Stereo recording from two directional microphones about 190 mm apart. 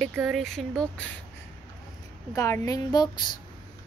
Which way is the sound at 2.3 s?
15° left (ahead or behind).